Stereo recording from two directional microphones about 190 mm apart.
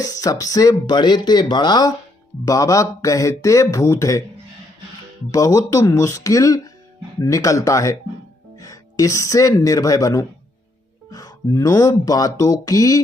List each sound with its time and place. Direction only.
0.0 s speech: 20° left (ahead or behind)
5.3 s speech: 15° left (ahead or behind)